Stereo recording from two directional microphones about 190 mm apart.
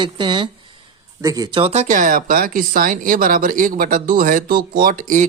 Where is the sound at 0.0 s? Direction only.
25° right (ahead or behind).